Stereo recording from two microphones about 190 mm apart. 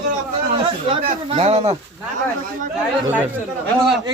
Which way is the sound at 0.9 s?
30° right (ahead or behind).